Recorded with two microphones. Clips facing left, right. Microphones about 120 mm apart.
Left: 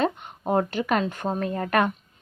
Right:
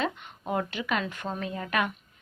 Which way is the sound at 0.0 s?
45° left (ahead or behind).